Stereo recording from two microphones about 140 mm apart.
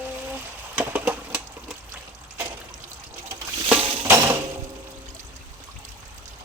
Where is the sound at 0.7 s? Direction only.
10° right (ahead or behind).